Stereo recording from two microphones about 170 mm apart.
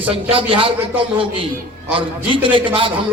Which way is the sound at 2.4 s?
30° right (ahead or behind).